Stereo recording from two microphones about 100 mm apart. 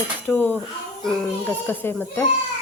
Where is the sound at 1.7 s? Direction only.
20° left (ahead or behind).